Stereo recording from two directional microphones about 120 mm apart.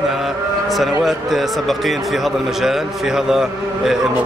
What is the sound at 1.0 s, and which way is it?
Speech, centre (ahead or behind).